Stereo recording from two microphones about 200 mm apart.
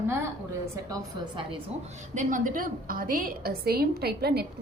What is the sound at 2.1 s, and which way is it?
A woman's voice, 40° right (ahead or behind).